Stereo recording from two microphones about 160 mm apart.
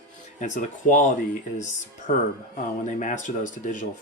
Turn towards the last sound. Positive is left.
turn(degrees=50)  # may be behind; listen again after turning